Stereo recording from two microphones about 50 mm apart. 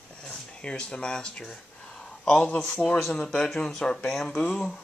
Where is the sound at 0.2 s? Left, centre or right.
Centre.